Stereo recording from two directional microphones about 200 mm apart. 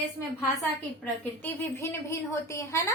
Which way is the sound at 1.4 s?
10° left (ahead or behind).